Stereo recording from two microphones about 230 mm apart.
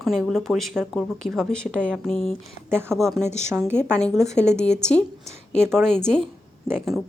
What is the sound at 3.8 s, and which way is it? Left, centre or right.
A woman's voice, centre.